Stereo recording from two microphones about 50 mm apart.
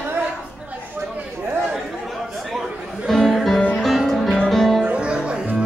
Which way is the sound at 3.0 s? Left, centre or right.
Centre.